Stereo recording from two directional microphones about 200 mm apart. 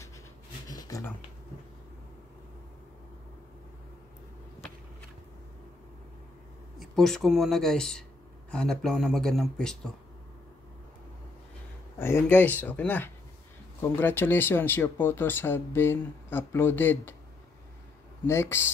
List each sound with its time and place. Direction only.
0.7 s a sound: 20° left (ahead or behind)
6.8 s speech: centre (ahead or behind)
12.0 s speech: 10° left (ahead or behind)
18.2 s speech: 10° left (ahead or behind)